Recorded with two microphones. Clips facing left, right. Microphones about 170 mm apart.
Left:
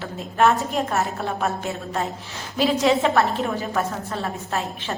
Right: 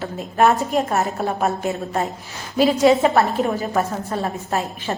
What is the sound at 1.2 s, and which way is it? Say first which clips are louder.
Speech: right 4 dB; 40° right (ahead or behind).